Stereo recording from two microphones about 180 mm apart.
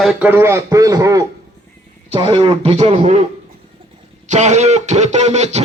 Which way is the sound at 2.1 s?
30° right (ahead or behind).